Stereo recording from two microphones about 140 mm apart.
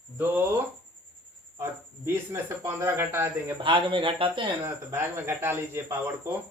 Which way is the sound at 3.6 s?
35° right (ahead or behind).